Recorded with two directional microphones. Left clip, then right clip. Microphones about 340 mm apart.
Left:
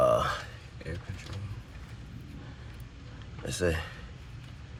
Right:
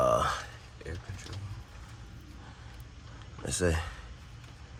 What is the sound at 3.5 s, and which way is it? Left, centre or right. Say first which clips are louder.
Speech: even; right.